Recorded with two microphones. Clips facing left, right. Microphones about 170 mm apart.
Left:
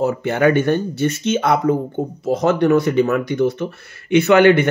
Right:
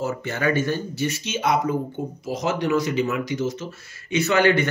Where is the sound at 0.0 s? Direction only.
60° left (ahead or behind).